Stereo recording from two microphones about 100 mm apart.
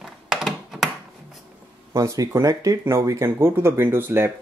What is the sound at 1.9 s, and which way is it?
Speech, 35° right (ahead or behind).